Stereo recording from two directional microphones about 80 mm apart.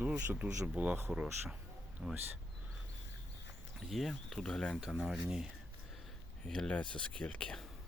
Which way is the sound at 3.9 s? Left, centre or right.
Centre.